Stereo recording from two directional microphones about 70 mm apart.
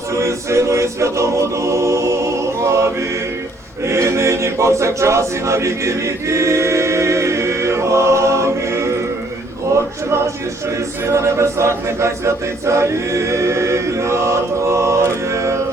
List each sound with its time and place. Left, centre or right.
0.1 s a capella: right
11.0 s a capella: right